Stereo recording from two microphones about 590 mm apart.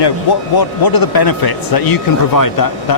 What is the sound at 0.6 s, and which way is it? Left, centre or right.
Speech, left.